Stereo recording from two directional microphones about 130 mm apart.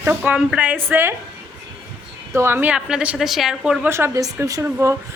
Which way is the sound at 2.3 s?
20° right (ahead or behind).